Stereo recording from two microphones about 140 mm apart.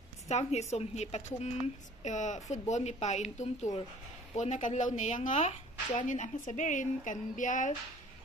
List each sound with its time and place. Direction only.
0.3 s a woman's voice: 50° left (ahead or behind)